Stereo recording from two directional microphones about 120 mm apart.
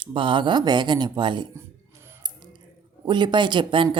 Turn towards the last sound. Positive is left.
turn(degrees=-45)  # may be behind; listen again after turning